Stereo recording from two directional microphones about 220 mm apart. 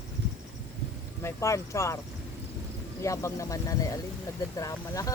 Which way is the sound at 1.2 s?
15° left (ahead or behind).